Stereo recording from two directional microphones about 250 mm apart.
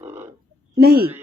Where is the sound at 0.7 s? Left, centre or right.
Right.